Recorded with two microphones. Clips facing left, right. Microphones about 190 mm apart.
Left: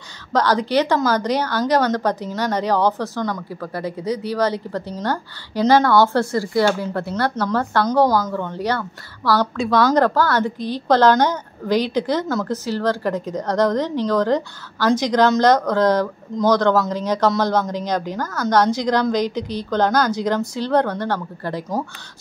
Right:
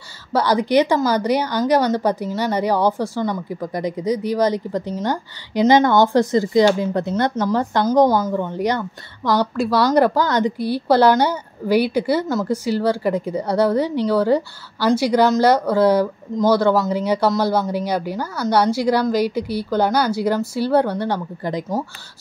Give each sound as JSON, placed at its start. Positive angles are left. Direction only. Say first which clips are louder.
{"t": 0.3, "sound": "a woman's voice", "louder": "right 1 dB", "side_deg": -10}